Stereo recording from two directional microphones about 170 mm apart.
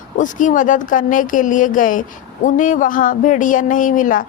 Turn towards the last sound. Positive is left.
turn(degrees=50)  # may be behind; listen again after turning